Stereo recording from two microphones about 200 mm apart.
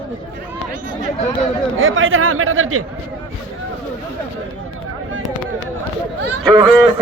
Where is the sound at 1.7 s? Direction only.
80° right.